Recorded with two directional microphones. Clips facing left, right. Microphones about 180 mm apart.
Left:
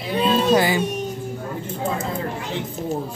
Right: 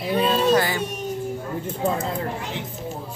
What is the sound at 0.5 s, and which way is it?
Speech, 15° left (ahead or behind).